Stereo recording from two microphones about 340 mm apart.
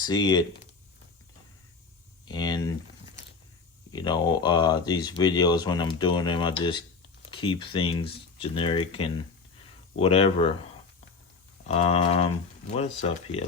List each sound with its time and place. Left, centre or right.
0.0 s speech: centre
2.2 s a sound: centre
3.9 s speech: centre
11.6 s speech: centre